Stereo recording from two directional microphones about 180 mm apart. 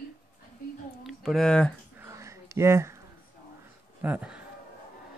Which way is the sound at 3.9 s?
10° right (ahead or behind).